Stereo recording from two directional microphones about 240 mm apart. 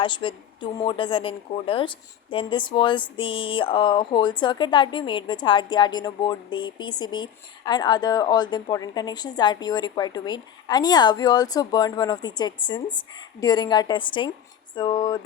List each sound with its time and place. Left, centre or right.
0.0 s speech: left